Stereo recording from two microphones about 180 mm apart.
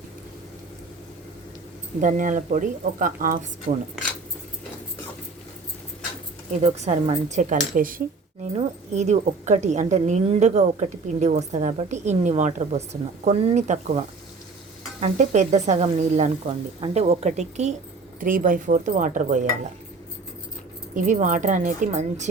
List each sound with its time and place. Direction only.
2.0 s a woman's voice: 45° right (ahead or behind)
6.5 s speech: 40° right (ahead or behind)
8.5 s speech: 40° right (ahead or behind)
15.0 s a woman's voice: 40° right (ahead or behind)
20.9 s a woman's voice: 45° right (ahead or behind)